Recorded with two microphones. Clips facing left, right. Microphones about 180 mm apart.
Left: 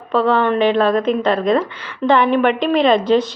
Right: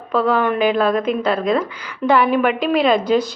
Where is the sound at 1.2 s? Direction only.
5° right (ahead or behind).